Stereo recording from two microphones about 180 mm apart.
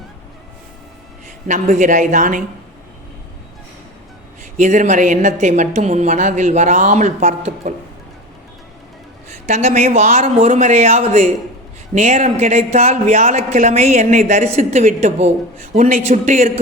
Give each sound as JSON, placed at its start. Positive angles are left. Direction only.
{"t": 1.5, "sound": "a woman's voice", "side_deg": -40}
{"t": 4.5, "sound": "a woman's voice", "side_deg": -45}
{"t": 9.5, "sound": "a man's voice", "side_deg": -40}